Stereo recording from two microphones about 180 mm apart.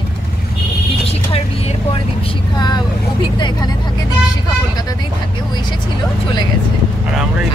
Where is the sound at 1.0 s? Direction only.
35° left (ahead or behind).